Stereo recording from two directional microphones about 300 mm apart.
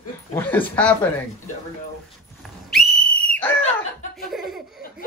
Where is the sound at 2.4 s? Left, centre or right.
Centre.